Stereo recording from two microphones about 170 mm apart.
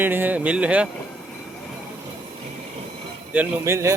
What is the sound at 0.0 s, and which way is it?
Speech, 10° right (ahead or behind).